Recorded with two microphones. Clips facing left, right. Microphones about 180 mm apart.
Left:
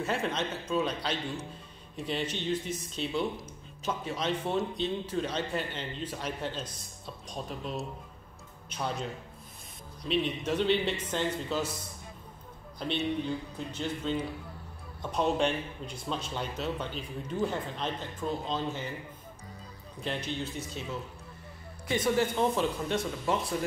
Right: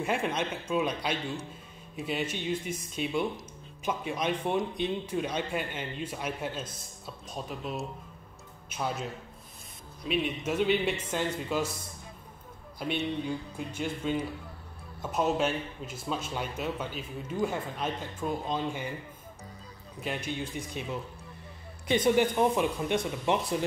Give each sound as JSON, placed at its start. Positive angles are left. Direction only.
{"t": 0.0, "sound": "speech", "side_deg": -10}
{"t": 10.0, "sound": "speech", "side_deg": -10}
{"t": 12.7, "sound": "speech", "side_deg": -10}
{"t": 20.0, "sound": "speech", "side_deg": -10}